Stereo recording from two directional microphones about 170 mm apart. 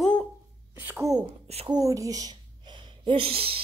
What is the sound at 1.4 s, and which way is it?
Speech, 35° right (ahead or behind).